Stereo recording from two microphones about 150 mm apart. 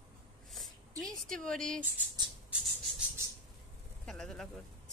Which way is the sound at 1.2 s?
5° left (ahead or behind).